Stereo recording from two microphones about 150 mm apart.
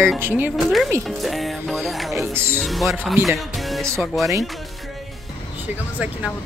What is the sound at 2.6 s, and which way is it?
Speech, centre (ahead or behind).